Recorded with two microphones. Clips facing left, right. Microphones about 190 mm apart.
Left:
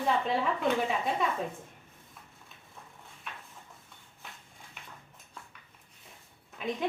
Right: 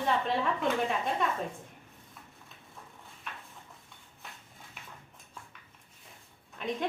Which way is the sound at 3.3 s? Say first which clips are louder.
Even; centre (ahead or behind).